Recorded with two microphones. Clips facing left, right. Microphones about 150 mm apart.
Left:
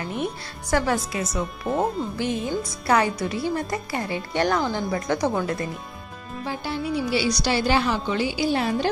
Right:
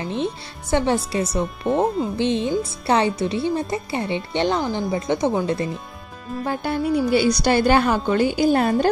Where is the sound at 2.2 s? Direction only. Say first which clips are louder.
Right 5 dB; 25° right (ahead or behind).